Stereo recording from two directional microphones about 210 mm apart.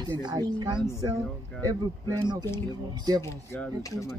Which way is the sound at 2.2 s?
20° right (ahead or behind).